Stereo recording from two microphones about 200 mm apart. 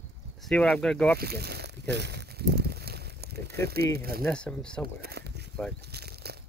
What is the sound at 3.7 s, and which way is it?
Speech, 50° right (ahead or behind).